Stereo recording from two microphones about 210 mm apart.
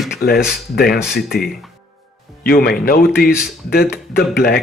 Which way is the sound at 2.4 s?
45° left (ahead or behind).